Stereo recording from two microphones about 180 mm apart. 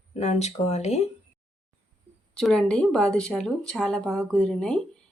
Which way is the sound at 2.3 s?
5° left (ahead or behind).